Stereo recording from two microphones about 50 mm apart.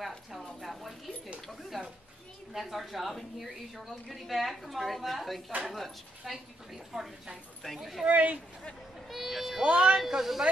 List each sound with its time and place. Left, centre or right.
0.3 s a sound: centre
2.5 s a woman's voice: centre
8.0 s speech: right
9.1 s a sound: centre
9.6 s speech: right
9.9 s a woman's voice: centre